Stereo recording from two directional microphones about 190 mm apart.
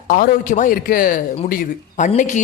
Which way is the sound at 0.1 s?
45° left (ahead or behind).